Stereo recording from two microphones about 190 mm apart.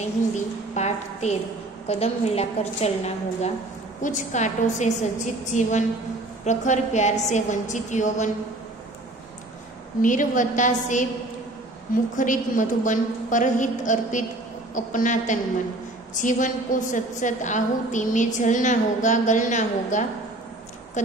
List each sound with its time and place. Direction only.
0.7 s a woman's voice: 35° left (ahead or behind)
10.0 s a woman's voice: 40° left (ahead or behind)